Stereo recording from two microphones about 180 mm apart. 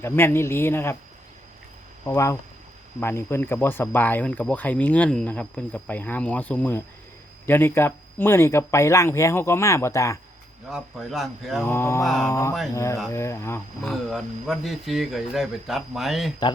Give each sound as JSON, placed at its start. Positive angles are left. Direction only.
{"t": 0.0, "sound": "speech", "side_deg": 15}
{"t": 2.0, "sound": "speech", "side_deg": 15}
{"t": 10.7, "sound": "speech", "side_deg": 0}
{"t": 11.7, "sound": "speech", "side_deg": 15}
{"t": 12.0, "sound": "speech", "side_deg": 5}
{"t": 12.3, "sound": "speech", "side_deg": 20}
{"t": 13.9, "sound": "speech", "side_deg": 0}